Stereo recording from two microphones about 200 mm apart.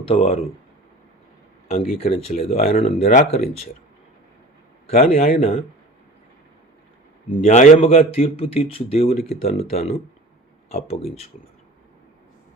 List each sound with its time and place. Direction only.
0.0 s speech: 30° left (ahead or behind)
1.6 s speech: 30° left (ahead or behind)
5.1 s speech: 30° left (ahead or behind)
7.3 s a man's voice: 40° left (ahead or behind)